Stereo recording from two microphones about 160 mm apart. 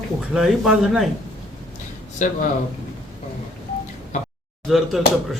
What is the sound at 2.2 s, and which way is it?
Speech, 50° left (ahead or behind).